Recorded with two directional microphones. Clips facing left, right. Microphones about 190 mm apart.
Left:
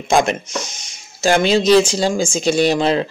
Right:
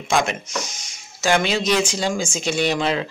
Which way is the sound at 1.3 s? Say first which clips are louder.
Left 7 dB; 30° left (ahead or behind).